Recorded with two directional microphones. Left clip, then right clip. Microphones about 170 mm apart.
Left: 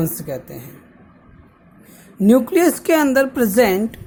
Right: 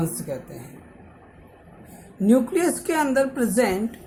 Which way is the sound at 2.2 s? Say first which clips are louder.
Left 6 dB; 55° left (ahead or behind).